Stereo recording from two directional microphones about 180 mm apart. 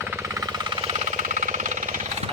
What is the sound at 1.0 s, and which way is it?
Jackhammer, 40° right (ahead or behind).